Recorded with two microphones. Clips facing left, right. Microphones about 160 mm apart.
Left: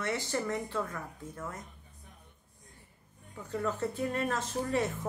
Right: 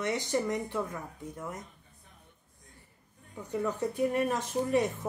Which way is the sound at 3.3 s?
15° right (ahead or behind).